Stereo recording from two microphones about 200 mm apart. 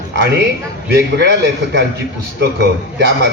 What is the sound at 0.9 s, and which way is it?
Speech, 55° right (ahead or behind).